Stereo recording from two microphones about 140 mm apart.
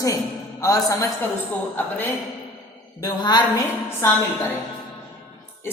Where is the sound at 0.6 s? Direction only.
25° left (ahead or behind).